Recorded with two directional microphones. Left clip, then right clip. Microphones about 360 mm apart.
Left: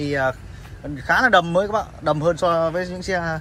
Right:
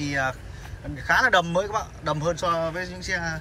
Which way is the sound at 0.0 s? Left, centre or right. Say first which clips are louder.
Left 5 dB; centre.